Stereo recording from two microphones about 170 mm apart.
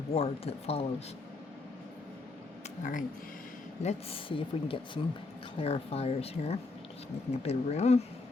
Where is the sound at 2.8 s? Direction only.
50° left (ahead or behind).